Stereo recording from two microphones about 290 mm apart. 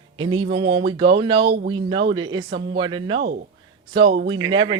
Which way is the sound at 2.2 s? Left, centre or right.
Right.